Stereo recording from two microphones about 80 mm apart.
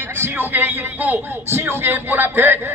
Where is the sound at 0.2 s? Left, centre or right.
Right.